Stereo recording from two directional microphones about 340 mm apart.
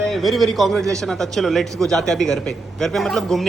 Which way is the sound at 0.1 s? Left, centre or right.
Centre.